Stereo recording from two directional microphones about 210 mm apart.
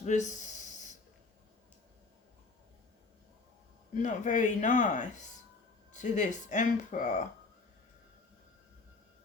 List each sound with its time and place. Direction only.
0.0 s snort: 35° left (ahead or behind)
4.0 s speech: 35° left (ahead or behind)